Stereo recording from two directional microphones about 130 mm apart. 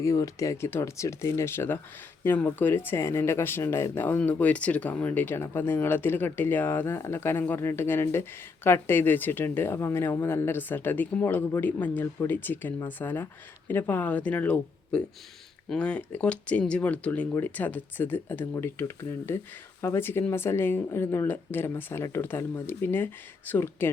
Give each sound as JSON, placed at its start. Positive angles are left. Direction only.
{"t": 0.0, "sound": "speech", "side_deg": 25}